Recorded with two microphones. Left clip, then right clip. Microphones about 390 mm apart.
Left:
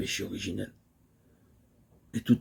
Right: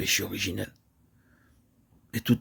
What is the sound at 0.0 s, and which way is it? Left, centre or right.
Speech, right.